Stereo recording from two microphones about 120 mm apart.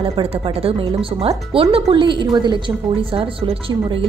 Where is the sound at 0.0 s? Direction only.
50° right (ahead or behind).